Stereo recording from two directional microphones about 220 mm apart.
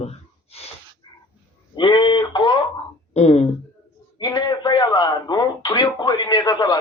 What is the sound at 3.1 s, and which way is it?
Speech, 30° left (ahead or behind).